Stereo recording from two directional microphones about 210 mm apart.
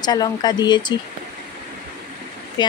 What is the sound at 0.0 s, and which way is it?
Speech, 20° left (ahead or behind).